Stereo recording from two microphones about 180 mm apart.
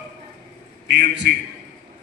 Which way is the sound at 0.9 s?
70° right (ahead or behind).